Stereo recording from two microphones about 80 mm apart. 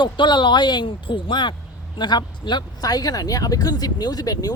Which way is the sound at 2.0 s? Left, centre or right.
Left.